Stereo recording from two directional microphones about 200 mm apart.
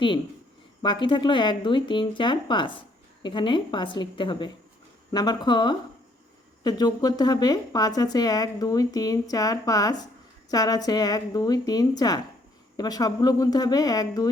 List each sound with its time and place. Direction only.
0.8 s a woman's voice: 25° left (ahead or behind)